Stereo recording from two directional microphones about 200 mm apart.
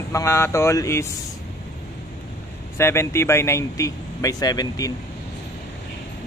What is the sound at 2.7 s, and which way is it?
Speech, 15° left (ahead or behind).